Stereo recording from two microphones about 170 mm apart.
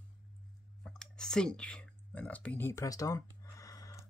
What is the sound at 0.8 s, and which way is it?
Speech, 5° left (ahead or behind).